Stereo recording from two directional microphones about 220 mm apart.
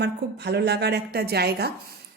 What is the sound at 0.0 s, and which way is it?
Speech, 50° right (ahead or behind).